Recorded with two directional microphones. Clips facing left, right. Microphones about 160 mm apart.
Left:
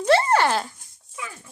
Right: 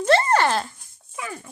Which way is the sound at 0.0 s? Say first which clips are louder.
Even; 10° left (ahead or behind).